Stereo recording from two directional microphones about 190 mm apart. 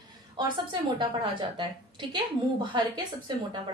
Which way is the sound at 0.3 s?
25° right (ahead or behind).